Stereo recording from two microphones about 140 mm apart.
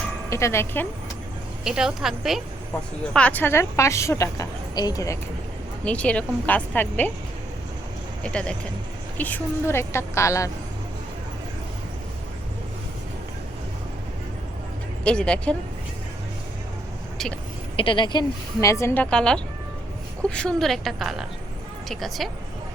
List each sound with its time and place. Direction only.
0.3 s a woman's voice: 20° left (ahead or behind)
1.6 s a woman's voice: 5° right (ahead or behind)
3.1 s a woman's voice: 10° left (ahead or behind); by 5.1 s 25° left (ahead or behind)
5.8 s a woman's voice: 10° left (ahead or behind)
8.2 s a woman's voice: 5° left (ahead or behind); by 10.5 s 20° left (ahead or behind)
15.0 s a woman's voice: 5° left (ahead or behind)
17.7 s a woman's voice: 35° left (ahead or behind); by 19.0 s 20° left (ahead or behind)
19.1 s a woman's voice: 5° left (ahead or behind)